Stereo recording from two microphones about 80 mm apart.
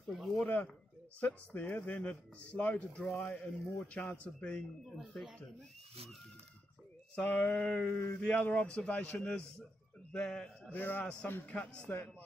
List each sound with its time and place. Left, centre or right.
0.0 s speech: centre
1.2 s speech: left
7.2 s speech: left
7.9 s a man's voice: left
10.7 s speech: left
11.4 s a man's voice: centre